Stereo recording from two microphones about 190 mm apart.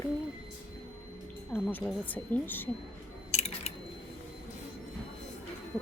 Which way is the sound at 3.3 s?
35° left (ahead or behind).